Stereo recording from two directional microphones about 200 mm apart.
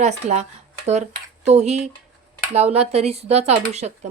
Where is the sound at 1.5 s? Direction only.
35° right (ahead or behind).